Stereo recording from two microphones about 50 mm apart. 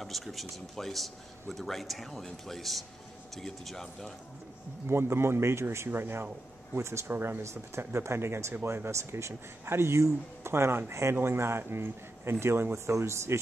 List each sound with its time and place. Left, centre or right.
0.0 s a man's voice: centre
4.8 s speech: right
5.9 s speech: right
6.8 s speech: right
7.1 s speech: right
7.8 s speech: right
11.1 s speech: right